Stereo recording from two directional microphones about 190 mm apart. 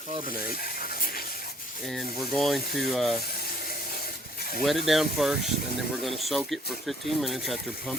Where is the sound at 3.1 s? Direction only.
55° left (ahead or behind).